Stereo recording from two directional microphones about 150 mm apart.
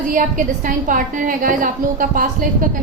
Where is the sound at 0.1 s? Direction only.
65° right (ahead or behind).